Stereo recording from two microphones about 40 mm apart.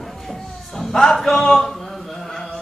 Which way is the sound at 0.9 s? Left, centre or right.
Centre.